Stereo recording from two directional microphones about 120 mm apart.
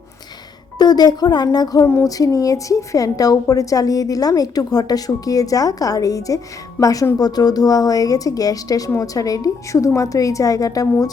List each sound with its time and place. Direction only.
0.8 s a woman's voice: 35° left (ahead or behind)